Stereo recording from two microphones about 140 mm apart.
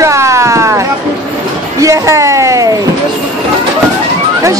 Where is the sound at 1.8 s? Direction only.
20° right (ahead or behind).